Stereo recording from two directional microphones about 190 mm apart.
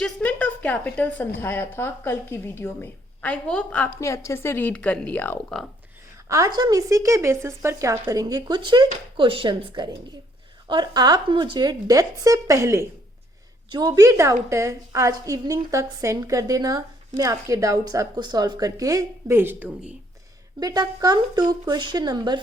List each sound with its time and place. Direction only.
0.0 s a woman's voice: 10° left (ahead or behind)
6.2 s speech: 15° right (ahead or behind)
20.6 s speech: 20° right (ahead or behind)